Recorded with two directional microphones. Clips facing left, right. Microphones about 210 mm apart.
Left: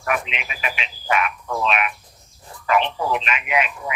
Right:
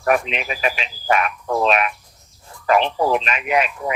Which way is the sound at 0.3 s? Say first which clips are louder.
Right 7 dB; 40° right (ahead or behind).